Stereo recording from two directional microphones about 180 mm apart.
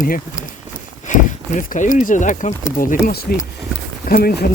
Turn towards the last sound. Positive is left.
turn(degrees=60)  # may be behind; listen again after turning